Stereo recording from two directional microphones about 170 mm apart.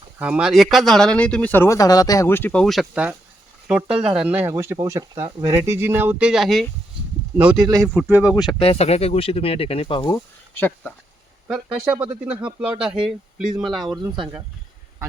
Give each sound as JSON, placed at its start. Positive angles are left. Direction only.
{"t": 0.2, "sound": "speech", "side_deg": -5}
{"t": 7.7, "sound": "speech", "side_deg": -20}
{"t": 8.0, "sound": "speech", "side_deg": -5}
{"t": 8.4, "sound": "speech", "side_deg": 30}
{"t": 10.5, "sound": "speech", "side_deg": 10}
{"t": 11.4, "sound": "speech", "side_deg": -5}
{"t": 13.9, "sound": "speech", "side_deg": -20}